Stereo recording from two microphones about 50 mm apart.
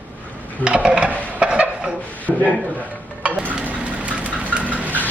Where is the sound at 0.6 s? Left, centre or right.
Right.